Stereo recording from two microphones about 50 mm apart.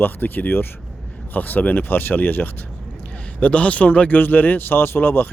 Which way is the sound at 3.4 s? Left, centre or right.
Left.